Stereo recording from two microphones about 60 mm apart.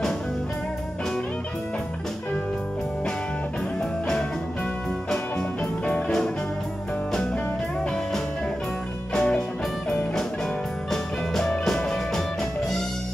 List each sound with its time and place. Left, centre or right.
5.9 s music: centre
9.1 s music: centre
10.9 s music: centre